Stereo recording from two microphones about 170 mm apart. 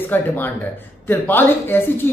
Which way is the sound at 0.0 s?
10° left (ahead or behind).